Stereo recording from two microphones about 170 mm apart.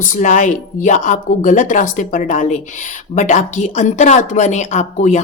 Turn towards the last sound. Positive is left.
turn(degrees=45)  # may be behind; listen again after turning